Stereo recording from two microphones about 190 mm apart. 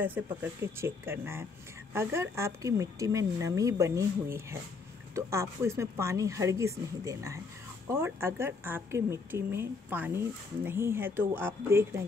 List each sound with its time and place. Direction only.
0.0 s a woman's voice: 10° right (ahead or behind)